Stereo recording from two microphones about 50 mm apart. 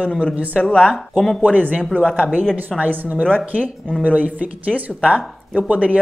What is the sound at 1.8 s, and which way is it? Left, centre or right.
Speech, centre.